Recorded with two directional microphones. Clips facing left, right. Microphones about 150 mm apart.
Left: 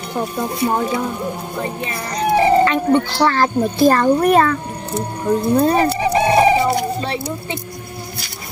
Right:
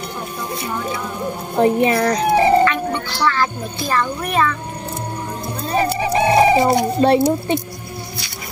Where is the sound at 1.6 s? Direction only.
65° right (ahead or behind).